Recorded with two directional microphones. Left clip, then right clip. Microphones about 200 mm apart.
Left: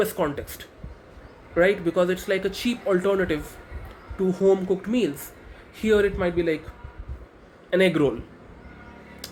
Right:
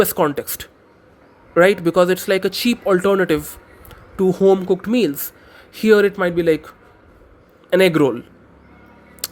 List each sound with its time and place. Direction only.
0.0 s speech: 50° right (ahead or behind)
7.7 s a man's voice: 55° right (ahead or behind)
9.2 s a sound: 55° right (ahead or behind)